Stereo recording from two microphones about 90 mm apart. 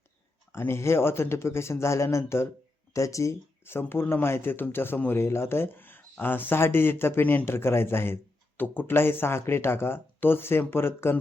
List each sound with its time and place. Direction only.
0.5 s speech: 30° left (ahead or behind)